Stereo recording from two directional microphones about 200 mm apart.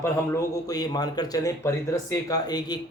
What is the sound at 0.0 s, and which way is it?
A man's voice, 15° left (ahead or behind).